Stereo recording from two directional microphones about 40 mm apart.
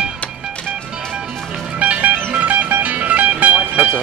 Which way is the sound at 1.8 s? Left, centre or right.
Right.